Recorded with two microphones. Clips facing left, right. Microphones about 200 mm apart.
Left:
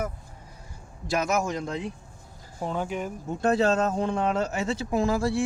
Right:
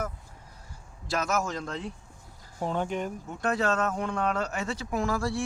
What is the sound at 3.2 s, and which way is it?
Speech, 25° left (ahead or behind).